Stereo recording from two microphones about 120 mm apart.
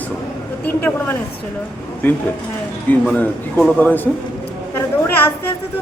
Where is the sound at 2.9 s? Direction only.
10° left (ahead or behind).